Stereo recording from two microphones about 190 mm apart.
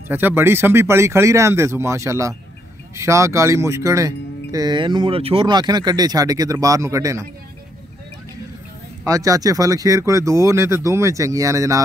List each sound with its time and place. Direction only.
0.1 s speech: 10° right (ahead or behind)
9.0 s speech: 15° right (ahead or behind)